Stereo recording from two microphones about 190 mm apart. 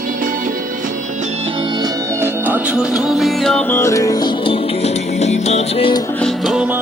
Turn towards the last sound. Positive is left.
turn(degrees=-5)  # may be behind; listen again after turning